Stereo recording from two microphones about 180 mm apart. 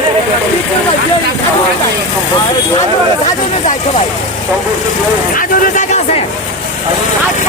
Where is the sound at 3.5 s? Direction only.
40° left (ahead or behind).